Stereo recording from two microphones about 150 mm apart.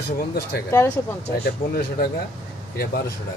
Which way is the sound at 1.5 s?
90° left.